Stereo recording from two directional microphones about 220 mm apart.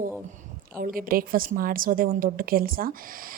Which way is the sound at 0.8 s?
40° right (ahead or behind).